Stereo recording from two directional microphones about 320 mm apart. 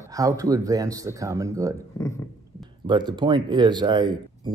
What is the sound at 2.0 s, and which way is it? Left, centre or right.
Speech, centre.